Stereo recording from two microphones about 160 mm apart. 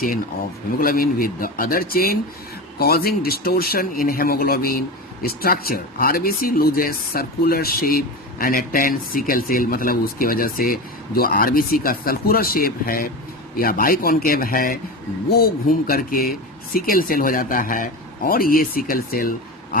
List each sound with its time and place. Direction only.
0.8 s speech: 65° left (ahead or behind)